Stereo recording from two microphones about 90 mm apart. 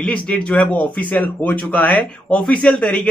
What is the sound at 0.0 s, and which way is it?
Speech, 15° left (ahead or behind).